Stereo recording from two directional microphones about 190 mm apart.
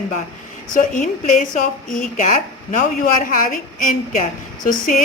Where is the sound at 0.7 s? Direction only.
45° left (ahead or behind).